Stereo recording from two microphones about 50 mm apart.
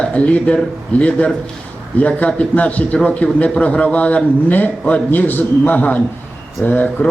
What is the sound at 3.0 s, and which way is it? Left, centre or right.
A man's voice, left.